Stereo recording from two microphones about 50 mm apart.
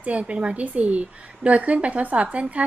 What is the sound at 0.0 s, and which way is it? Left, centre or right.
A woman's voice, right.